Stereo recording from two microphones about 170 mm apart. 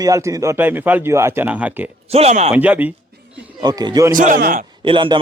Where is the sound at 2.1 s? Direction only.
40° right (ahead or behind).